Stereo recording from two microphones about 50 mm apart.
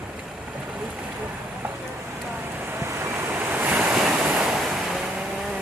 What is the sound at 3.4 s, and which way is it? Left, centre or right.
Waves, right.